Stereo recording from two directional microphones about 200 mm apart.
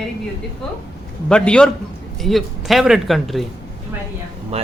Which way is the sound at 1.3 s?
5° left (ahead or behind).